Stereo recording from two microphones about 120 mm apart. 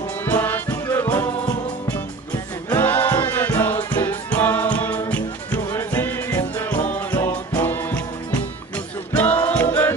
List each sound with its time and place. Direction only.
0.2 s music: 15° left (ahead or behind)
2.7 s music: 15° left (ahead or behind)